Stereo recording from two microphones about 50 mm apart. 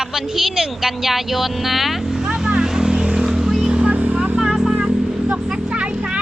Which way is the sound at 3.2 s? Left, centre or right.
Centre.